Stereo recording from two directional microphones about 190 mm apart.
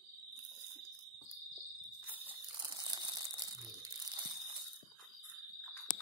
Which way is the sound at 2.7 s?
20° right (ahead or behind).